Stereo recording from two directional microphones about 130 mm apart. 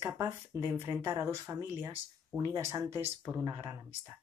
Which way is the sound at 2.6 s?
25° right (ahead or behind).